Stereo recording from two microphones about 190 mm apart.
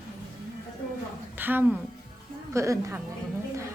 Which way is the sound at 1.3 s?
10° right (ahead or behind).